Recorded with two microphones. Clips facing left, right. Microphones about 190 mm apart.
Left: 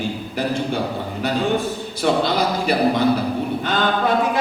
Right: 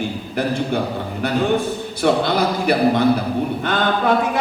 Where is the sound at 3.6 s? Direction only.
55° right (ahead or behind).